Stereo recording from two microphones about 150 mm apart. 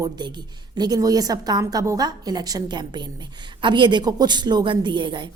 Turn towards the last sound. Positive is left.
turn(degrees=-30)  # may be behind; listen again after turning